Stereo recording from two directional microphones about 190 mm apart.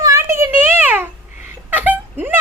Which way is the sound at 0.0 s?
15° right (ahead or behind).